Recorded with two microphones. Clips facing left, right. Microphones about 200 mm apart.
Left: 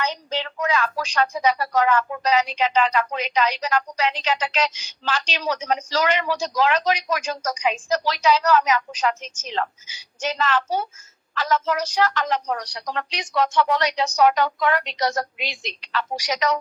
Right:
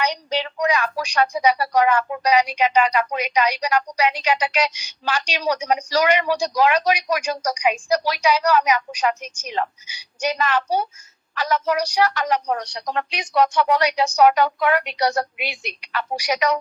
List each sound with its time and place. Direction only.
0.0 s a woman's voice: 15° right (ahead or behind)
12.5 s a woman's voice: 25° right (ahead or behind)